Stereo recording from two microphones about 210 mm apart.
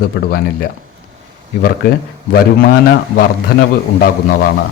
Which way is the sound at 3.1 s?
45° left (ahead or behind).